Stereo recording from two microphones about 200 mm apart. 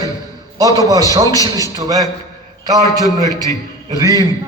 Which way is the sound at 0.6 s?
15° right (ahead or behind).